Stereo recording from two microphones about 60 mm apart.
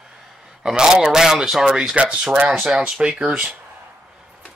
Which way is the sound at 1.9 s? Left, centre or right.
Right.